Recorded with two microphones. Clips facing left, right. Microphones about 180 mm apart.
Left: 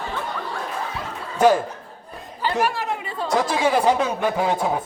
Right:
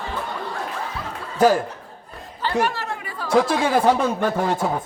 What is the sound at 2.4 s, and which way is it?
Chatter, 15° left (ahead or behind).